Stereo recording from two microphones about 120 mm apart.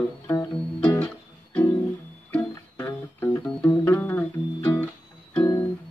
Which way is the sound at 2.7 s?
20° left (ahead or behind).